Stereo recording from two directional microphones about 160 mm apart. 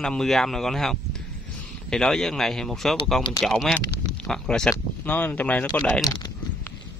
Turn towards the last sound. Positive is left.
turn(degrees=20)  # may be behind; listen again after turning